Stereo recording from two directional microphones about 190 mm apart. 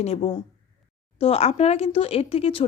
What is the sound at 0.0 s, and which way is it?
Speech, 30° left (ahead or behind).